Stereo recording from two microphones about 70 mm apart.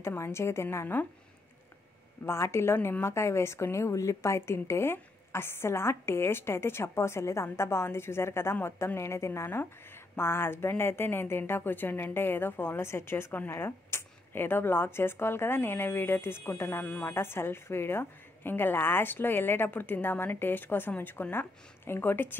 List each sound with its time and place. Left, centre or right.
0.2 s speech: left
2.2 s a woman's voice: left